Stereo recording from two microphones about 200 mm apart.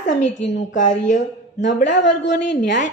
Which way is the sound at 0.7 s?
40° left (ahead or behind).